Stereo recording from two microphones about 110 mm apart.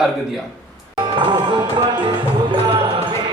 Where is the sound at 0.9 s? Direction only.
45° right (ahead or behind).